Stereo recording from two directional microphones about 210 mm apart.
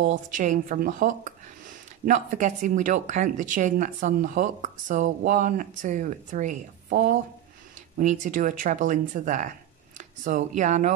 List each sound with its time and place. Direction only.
0.0 s speech: 40° right (ahead or behind)